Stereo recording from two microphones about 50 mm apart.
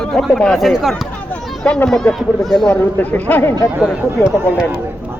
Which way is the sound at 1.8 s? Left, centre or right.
Centre.